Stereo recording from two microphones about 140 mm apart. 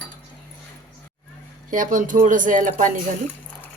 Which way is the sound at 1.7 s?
70° right (ahead or behind).